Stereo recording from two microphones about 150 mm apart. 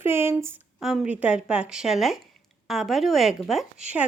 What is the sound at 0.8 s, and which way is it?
A woman's voice, centre (ahead or behind).